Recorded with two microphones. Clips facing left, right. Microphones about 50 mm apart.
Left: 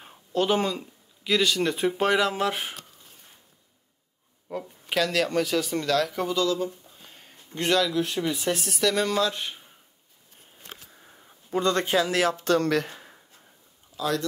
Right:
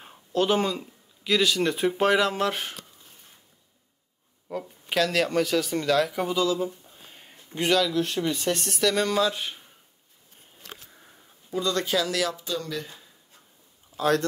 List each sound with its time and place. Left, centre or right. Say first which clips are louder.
0.0 s speech: right 1 dB; centre
4.5 s speech: even; centre
10.7 s a sound: even; centre
11.5 s speech: left 3 dB; left
12.4 s speech: left 9 dB; left
13.9 s speech: right 4 dB; right